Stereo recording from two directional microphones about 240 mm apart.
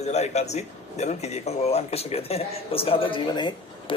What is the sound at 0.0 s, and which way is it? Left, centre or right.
Speech, left.